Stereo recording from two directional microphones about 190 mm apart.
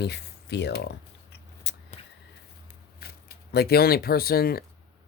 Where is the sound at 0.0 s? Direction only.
60° left (ahead or behind).